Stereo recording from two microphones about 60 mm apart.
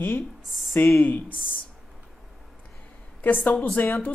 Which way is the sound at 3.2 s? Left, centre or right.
Left.